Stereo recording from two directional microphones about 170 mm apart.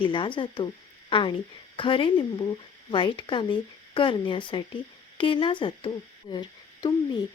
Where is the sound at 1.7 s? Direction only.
30° left (ahead or behind).